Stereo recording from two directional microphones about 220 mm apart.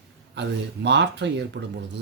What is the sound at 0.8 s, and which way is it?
Speech, 50° right (ahead or behind).